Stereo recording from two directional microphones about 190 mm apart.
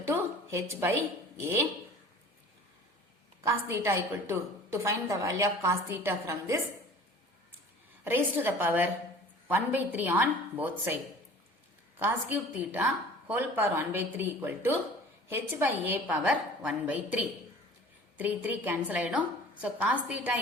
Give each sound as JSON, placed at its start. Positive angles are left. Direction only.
{"t": 0.0, "sound": "a sound", "side_deg": -15}
{"t": 3.4, "sound": "a woman's voice", "side_deg": -15}
{"t": 8.0, "sound": "a woman's voice", "side_deg": -10}
{"t": 11.9, "sound": "a woman's voice", "side_deg": -10}
{"t": 18.2, "sound": "a woman's voice", "side_deg": -10}